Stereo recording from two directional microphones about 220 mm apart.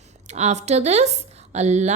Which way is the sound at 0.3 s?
30° right (ahead or behind).